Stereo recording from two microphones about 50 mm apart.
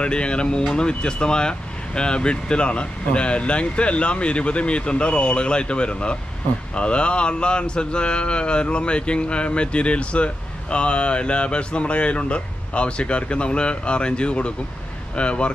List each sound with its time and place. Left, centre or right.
0.0 s speech: centre